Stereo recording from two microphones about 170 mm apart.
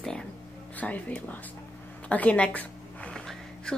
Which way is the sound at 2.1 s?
10° left (ahead or behind).